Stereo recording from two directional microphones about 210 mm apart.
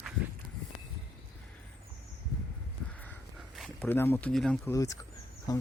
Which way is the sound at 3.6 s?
10° left (ahead or behind).